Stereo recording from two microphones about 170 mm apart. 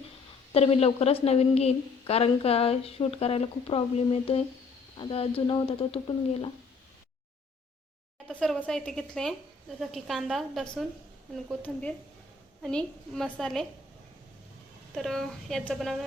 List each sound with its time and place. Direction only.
0.5 s a woman's voice: 35° left (ahead or behind)
8.3 s a woman's voice: 5° left (ahead or behind)
14.9 s a woman's voice: centre (ahead or behind)